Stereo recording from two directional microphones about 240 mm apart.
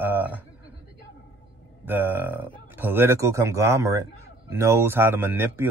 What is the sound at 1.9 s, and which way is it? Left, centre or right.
Speech, centre.